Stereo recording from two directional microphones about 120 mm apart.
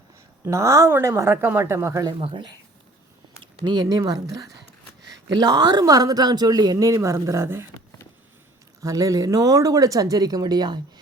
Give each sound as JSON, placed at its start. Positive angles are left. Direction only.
{"t": 0.4, "sound": "speech", "side_deg": -25}
{"t": 2.1, "sound": "speech", "side_deg": -45}
{"t": 8.8, "sound": "speech", "side_deg": -25}